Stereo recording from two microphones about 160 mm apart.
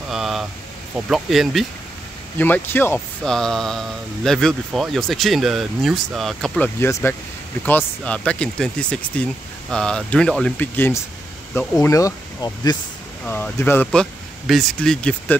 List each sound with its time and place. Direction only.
0.1 s a sound: centre (ahead or behind)
0.9 s speech: 5° right (ahead or behind)
2.3 s speech: 10° left (ahead or behind)
3.3 s speech: 5° left (ahead or behind); by 12.7 s 20° left (ahead or behind)
13.2 s speech: 10° left (ahead or behind)
14.5 s speech: centre (ahead or behind)